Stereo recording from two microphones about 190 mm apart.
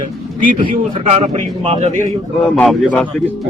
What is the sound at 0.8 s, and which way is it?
A man's voice, 35° right (ahead or behind).